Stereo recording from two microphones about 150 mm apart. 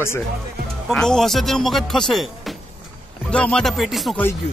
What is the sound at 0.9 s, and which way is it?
Music, 5° left (ahead or behind).